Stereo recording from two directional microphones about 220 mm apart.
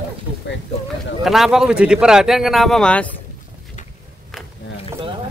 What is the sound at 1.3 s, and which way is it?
Speech, centre (ahead or behind).